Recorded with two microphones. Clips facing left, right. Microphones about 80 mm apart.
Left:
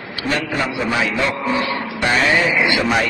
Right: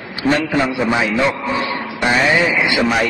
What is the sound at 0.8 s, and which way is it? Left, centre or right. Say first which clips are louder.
Speech: right 3 dB; centre.